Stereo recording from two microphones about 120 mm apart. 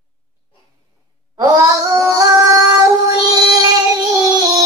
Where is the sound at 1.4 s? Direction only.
30° right (ahead or behind).